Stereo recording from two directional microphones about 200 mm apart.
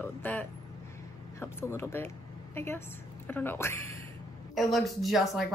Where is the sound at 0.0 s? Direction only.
10° left (ahead or behind).